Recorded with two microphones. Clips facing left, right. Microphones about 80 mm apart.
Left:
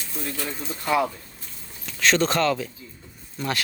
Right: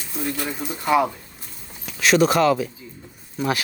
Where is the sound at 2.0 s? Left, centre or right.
Centre.